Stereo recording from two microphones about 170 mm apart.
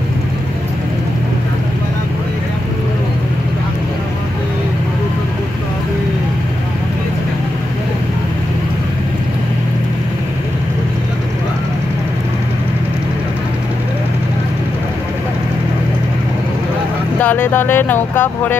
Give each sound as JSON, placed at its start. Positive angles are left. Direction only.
{"t": 17.2, "sound": "speech", "side_deg": 10}